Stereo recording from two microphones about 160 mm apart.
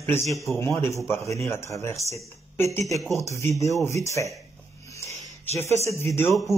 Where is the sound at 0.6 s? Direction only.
15° left (ahead or behind).